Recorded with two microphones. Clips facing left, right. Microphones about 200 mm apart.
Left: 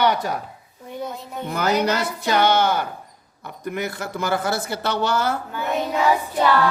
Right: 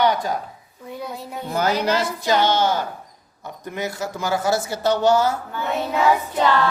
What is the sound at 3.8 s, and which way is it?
Speech, 60° left (ahead or behind).